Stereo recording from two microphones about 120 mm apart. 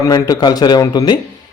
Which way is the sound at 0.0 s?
30° left (ahead or behind).